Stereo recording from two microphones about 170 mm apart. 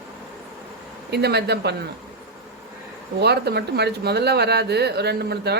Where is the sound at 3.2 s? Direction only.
75° right (ahead or behind).